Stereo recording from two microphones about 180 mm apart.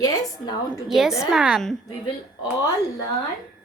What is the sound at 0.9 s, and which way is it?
Speech, centre (ahead or behind).